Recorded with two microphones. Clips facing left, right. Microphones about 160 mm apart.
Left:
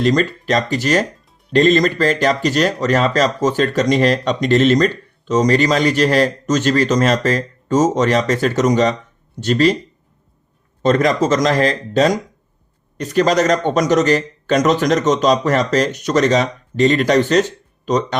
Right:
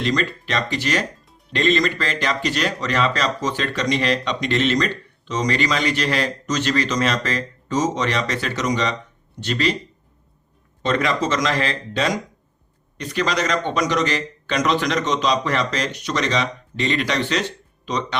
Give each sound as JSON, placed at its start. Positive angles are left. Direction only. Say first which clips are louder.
{"t": 0.0, "sound": "speech", "louder": "left 6 dB", "side_deg": 45}
{"t": 10.8, "sound": "speech", "louder": "left 6 dB", "side_deg": 40}